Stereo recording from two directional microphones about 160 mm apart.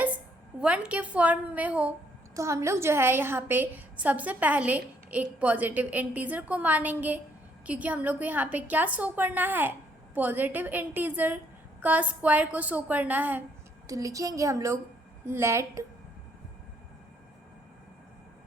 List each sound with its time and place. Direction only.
0.6 s a woman's voice: 5° right (ahead or behind)
2.3 s a woman's voice: 20° right (ahead or behind)